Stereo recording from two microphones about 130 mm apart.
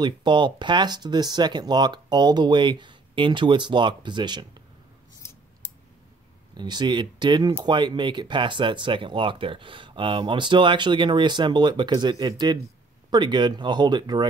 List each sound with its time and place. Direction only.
0.0 s speech: 35° right (ahead or behind)
6.5 s speech: 35° right (ahead or behind)